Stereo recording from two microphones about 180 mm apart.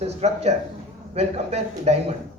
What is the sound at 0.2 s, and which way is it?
A man's voice, 35° right (ahead or behind).